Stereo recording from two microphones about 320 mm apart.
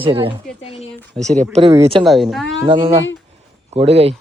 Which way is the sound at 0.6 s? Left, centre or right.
Centre.